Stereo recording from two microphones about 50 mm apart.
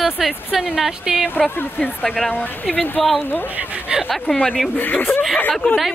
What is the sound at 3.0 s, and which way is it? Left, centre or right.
Speech, centre.